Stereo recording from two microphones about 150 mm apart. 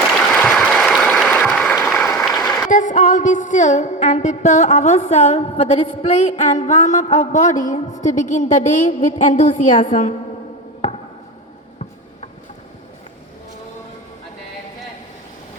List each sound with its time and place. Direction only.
0.3 s applause: 5° left (ahead or behind)
2.6 s a woman's voice: 55° left (ahead or behind)